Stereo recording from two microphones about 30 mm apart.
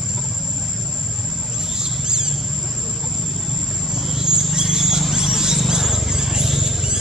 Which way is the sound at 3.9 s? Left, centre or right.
Centre.